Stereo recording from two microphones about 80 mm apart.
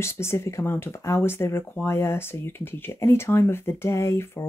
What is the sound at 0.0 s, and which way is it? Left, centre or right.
Speech, left.